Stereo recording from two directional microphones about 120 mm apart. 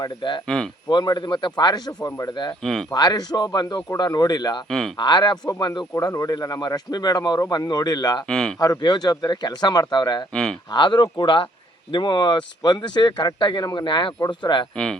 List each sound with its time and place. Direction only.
0.0 s speech: 40° left (ahead or behind)
0.4 s speech: 5° left (ahead or behind)
0.9 s speech: 35° left (ahead or behind)
8.3 s speech: 5° left (ahead or behind)
8.5 s speech: 25° left (ahead or behind)